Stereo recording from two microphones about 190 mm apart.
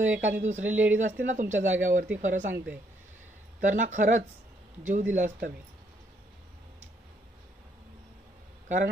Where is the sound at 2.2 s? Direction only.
45° right (ahead or behind).